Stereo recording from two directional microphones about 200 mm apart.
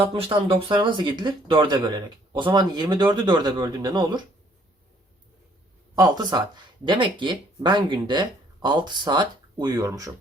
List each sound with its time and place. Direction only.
0.0 s speech: 25° right (ahead or behind)
6.0 s speech: 20° right (ahead or behind)